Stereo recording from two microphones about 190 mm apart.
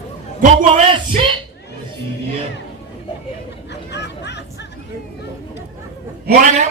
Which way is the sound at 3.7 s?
65° left (ahead or behind).